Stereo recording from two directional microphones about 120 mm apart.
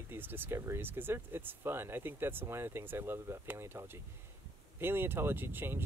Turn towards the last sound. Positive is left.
turn(degrees=-20)  # may be behind; listen again after turning